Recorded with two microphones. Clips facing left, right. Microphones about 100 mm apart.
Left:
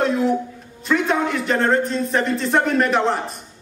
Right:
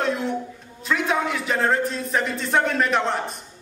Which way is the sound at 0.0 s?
Centre (ahead or behind).